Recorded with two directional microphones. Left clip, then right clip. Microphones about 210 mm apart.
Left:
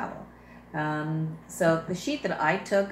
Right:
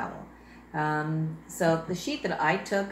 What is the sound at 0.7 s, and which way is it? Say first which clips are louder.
Speech: right 2 dB; 5° right (ahead or behind).